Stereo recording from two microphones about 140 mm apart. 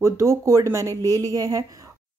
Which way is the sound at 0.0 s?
20° right (ahead or behind).